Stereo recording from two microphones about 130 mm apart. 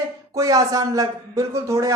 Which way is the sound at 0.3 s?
25° right (ahead or behind).